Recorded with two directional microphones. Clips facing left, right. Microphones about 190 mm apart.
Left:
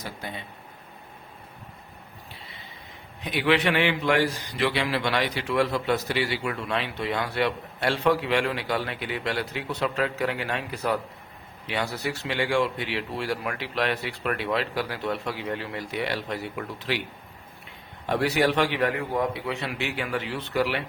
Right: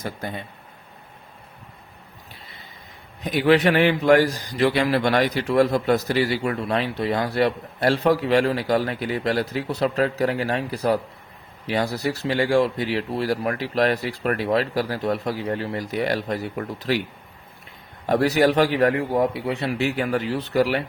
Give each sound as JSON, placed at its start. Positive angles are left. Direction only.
{"t": 0.2, "sound": "speech", "side_deg": -45}
{"t": 3.2, "sound": "a man's voice", "side_deg": -40}
{"t": 18.0, "sound": "a man's voice", "side_deg": -40}